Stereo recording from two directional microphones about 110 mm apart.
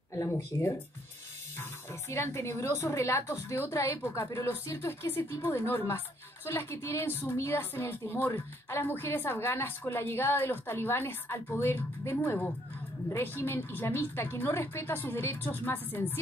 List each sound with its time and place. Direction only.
0.1 s speech: 25° left (ahead or behind)